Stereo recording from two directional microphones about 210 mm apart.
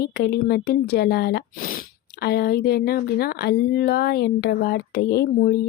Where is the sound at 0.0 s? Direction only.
50° left (ahead or behind).